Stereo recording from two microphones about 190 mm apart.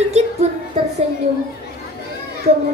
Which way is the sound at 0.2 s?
35° right (ahead or behind).